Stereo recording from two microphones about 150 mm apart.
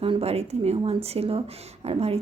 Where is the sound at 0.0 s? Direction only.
40° right (ahead or behind).